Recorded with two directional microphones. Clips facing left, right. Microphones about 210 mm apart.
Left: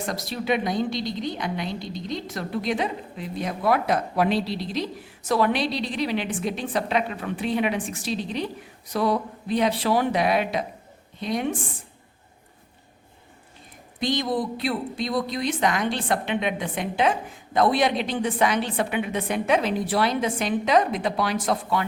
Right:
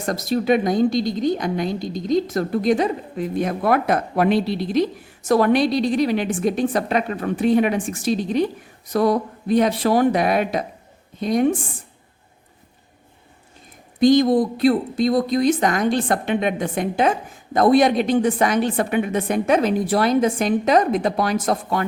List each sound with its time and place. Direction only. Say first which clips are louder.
0.0 s a woman's voice: right 8 dB; 45° right (ahead or behind)
14.0 s a woman's voice: right 10 dB; 45° right (ahead or behind)